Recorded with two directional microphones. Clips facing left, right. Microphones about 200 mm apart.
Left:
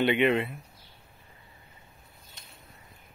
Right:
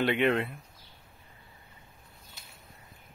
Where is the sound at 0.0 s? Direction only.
Centre (ahead or behind).